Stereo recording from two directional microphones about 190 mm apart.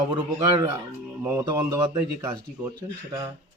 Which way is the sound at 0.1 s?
20° right (ahead or behind).